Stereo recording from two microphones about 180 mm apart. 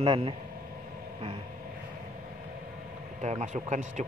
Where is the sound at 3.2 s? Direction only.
40° right (ahead or behind).